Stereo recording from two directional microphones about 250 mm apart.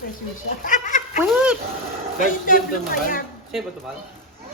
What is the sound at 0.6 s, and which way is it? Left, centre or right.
Goat, left.